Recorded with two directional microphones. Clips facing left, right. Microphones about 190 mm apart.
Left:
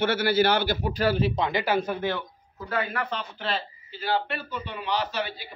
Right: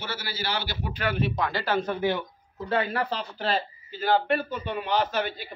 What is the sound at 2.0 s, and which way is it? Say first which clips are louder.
Speech: right 2 dB; 15° right (ahead or behind).